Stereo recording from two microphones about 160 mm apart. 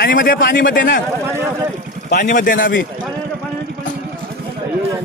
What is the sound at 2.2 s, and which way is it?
Speech, 55° left (ahead or behind).